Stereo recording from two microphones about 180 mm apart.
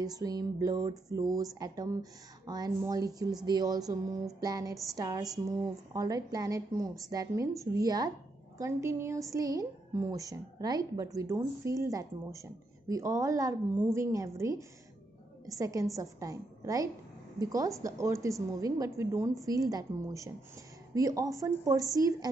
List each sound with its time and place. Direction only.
0.0 s a woman's voice: 20° right (ahead or behind)